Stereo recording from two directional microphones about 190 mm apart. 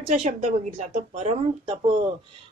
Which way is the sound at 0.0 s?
35° right (ahead or behind).